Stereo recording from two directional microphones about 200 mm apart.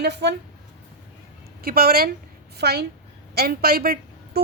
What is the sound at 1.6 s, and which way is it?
A woman's voice, 50° right (ahead or behind).